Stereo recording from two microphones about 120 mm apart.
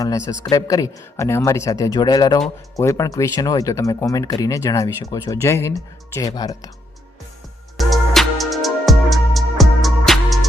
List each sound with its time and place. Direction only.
0.5 s speech: 30° left (ahead or behind)
7.8 s music: centre (ahead or behind)